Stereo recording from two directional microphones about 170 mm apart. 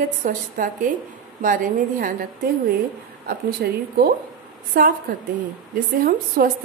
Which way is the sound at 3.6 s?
65° right (ahead or behind).